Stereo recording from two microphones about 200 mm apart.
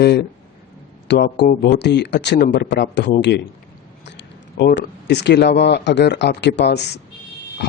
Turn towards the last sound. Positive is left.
turn(degrees=60)  # may be behind; listen again after turning